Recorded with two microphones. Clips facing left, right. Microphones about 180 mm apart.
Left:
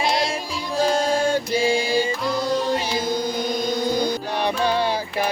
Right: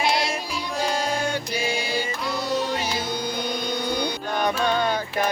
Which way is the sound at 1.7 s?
30° left (ahead or behind).